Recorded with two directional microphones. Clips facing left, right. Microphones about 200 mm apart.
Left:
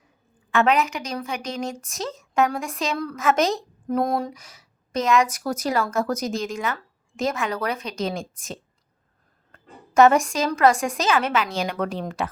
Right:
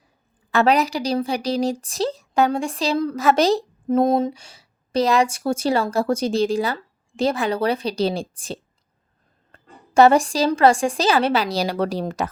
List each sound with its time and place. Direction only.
0.5 s a woman's voice: 35° right (ahead or behind)